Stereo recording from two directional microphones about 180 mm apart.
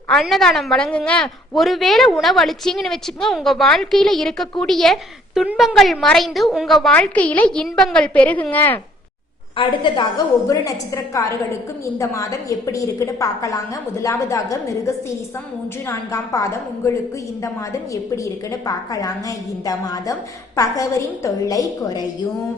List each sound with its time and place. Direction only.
0.1 s a woman's voice: centre (ahead or behind)
9.6 s a woman's voice: 25° left (ahead or behind)